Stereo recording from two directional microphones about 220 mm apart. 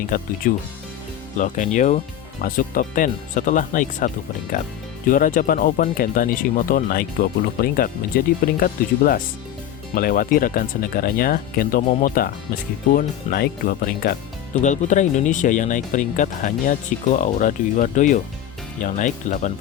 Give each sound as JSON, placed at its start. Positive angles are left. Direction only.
{"t": 0.4, "sound": "speech", "side_deg": 35}